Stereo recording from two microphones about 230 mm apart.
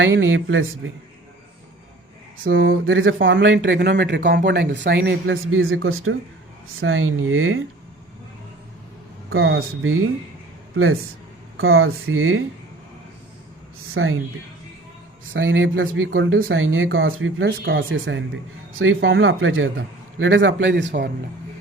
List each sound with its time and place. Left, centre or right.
0.0 s speech: right
2.4 s speech: right
9.3 s speech: right
11.5 s speech: right
13.9 s speech: right
15.3 s speech: right